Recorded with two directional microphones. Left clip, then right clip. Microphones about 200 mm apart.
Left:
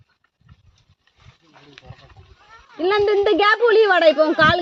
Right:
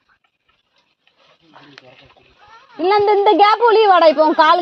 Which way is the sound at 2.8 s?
25° right (ahead or behind).